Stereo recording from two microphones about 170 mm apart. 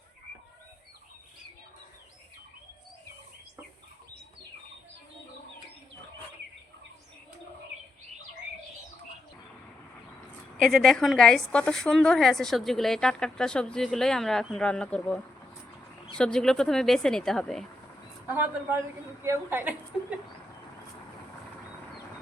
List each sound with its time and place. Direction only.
10.6 s a woman's voice: centre (ahead or behind)
18.3 s a woman's voice: 10° right (ahead or behind)